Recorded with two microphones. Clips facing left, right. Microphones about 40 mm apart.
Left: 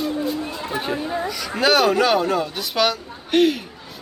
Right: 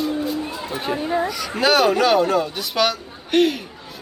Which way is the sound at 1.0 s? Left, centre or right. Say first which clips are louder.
Right 4 dB; centre.